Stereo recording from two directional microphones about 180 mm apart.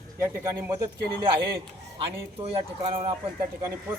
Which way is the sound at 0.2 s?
15° right (ahead or behind).